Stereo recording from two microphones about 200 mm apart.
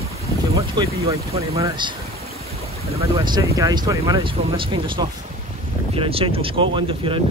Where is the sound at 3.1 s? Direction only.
20° right (ahead or behind).